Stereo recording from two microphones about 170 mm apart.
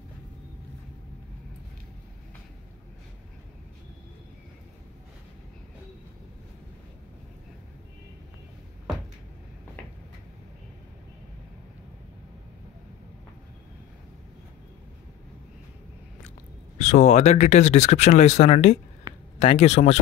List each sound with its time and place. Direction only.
16.7 s speech: 40° left (ahead or behind)